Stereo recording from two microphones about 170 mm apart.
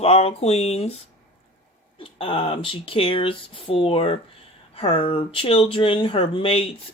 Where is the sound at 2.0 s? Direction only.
30° left (ahead or behind).